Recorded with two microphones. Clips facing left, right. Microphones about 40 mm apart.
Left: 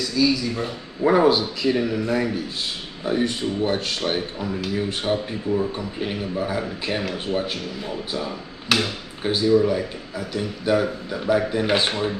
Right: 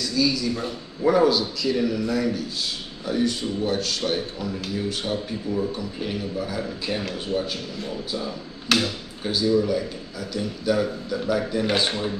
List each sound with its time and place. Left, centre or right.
0.0 s speech: centre
1.0 s a man's voice: left
8.6 s speech: centre
9.2 s a man's voice: left